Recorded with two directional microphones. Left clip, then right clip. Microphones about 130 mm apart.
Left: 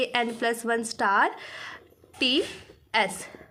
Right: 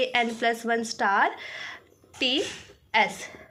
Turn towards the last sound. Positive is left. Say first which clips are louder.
# right 2 dB
turn(degrees=25)  # may be behind; listen again after turning